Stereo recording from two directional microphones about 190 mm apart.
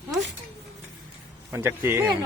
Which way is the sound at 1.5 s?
15° right (ahead or behind).